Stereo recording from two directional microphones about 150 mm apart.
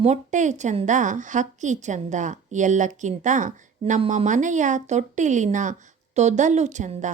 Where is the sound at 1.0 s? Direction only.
55° right (ahead or behind).